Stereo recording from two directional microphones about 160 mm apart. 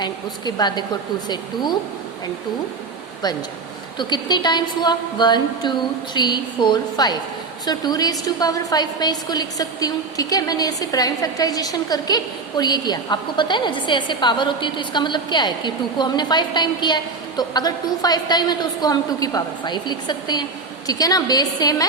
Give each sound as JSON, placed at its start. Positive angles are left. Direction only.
{"t": 0.0, "sound": "a woman's voice", "side_deg": 25}
{"t": 3.9, "sound": "a woman's voice", "side_deg": 30}